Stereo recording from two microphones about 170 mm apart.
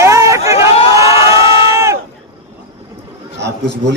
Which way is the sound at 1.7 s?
15° right (ahead or behind).